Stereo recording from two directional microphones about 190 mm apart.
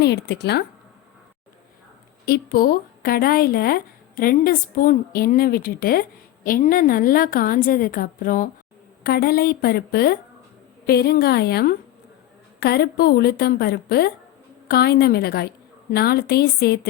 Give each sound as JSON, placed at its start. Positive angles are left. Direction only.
{"t": 0.0, "sound": "a woman's voice", "side_deg": 60}
{"t": 2.2, "sound": "a woman's voice", "side_deg": 55}